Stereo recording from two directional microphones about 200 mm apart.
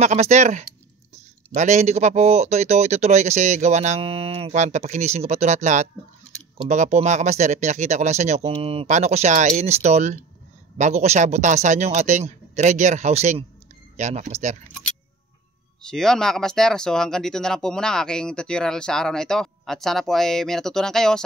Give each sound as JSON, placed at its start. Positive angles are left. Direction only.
{"t": 0.0, "sound": "a man's voice", "side_deg": -35}
{"t": 15.8, "sound": "speech", "side_deg": 5}